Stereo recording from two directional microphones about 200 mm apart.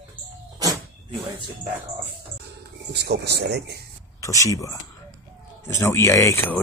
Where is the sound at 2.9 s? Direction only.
55° right (ahead or behind).